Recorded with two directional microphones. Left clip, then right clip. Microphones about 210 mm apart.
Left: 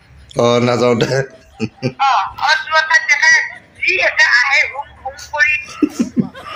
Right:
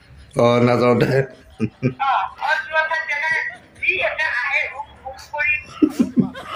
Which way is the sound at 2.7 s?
25° left (ahead or behind).